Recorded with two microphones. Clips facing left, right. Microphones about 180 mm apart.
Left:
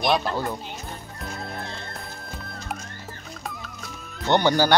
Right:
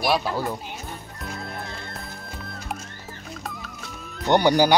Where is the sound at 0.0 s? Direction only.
5° right (ahead or behind).